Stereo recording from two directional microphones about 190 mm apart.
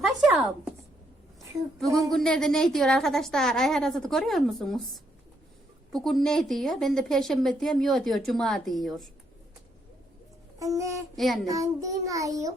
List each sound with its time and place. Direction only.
0.2 s speech: 5° right (ahead or behind)
2.0 s a woman's voice: centre (ahead or behind)
5.9 s a woman's voice: centre (ahead or behind)
10.6 s a sound: 15° right (ahead or behind)
11.2 s a woman's voice: centre (ahead or behind)
11.4 s child singing: 15° right (ahead or behind)